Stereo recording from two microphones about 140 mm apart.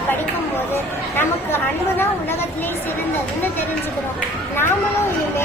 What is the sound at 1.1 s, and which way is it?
Speech, 15° left (ahead or behind).